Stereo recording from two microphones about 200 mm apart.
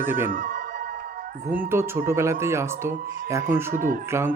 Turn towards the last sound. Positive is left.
turn(degrees=-45)  # may be behind; listen again after turning